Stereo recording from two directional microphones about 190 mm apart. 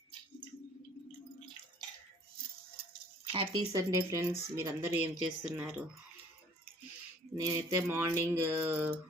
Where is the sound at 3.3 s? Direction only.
25° right (ahead or behind); by 5.7 s 5° right (ahead or behind).